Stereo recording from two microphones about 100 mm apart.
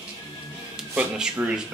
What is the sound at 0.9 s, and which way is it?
Speech, 10° right (ahead or behind).